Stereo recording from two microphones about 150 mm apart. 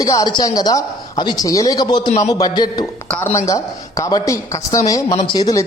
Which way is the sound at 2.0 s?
50° left (ahead or behind).